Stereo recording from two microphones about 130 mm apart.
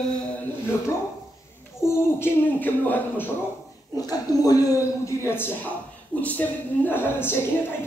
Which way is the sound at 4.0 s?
30° left (ahead or behind).